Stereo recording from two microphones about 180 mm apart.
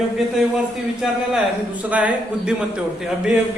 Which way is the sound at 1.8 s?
10° right (ahead or behind).